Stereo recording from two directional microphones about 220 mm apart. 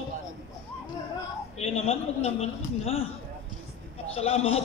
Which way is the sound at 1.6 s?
30° left (ahead or behind).